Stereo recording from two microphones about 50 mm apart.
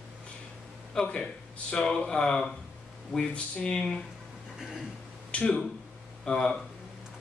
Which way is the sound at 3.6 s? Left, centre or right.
Centre.